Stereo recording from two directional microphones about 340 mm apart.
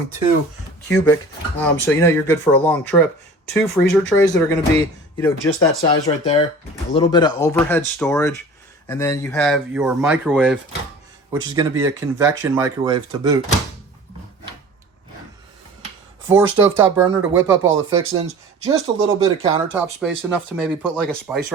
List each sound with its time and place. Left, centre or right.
0.9 s speech: centre
16.2 s speech: centre
17.7 s speech: right
18.2 s speech: centre
19.7 s speech: centre